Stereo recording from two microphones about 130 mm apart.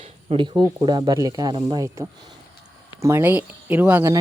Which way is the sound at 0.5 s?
30° right (ahead or behind).